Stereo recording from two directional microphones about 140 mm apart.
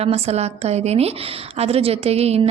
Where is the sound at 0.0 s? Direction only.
50° right (ahead or behind).